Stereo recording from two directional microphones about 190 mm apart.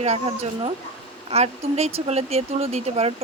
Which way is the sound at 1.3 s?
35° right (ahead or behind).